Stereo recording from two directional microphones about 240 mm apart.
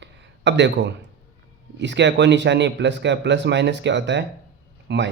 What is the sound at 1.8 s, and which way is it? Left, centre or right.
Speech, right.